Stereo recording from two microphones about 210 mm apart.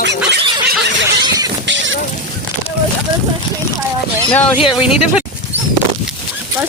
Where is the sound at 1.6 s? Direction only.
60° right (ahead or behind).